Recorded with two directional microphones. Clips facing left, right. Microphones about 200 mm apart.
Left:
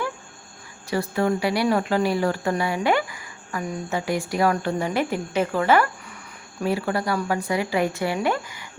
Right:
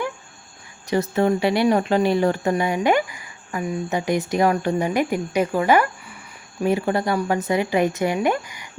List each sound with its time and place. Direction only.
0.9 s a woman's voice: 20° right (ahead or behind)